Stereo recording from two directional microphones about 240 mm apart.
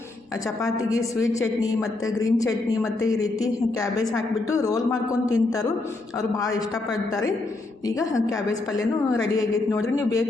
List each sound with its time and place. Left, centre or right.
0.6 s speech: centre
2.0 s speech: centre
6.9 s speech: centre